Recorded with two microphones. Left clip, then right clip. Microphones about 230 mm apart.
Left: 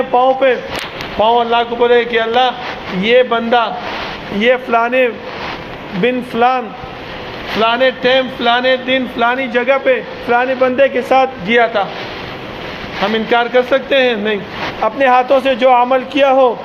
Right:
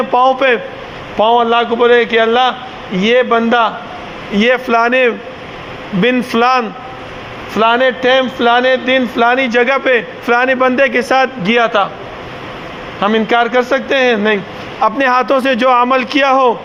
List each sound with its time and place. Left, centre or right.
0.1 s a man's voice: right
13.0 s a man's voice: right